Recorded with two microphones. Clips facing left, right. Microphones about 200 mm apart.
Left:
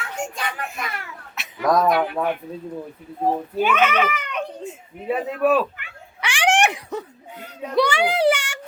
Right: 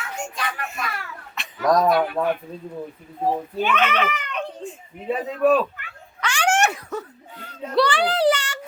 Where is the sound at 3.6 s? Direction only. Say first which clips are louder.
Left 3 dB; 10° left (ahead or behind).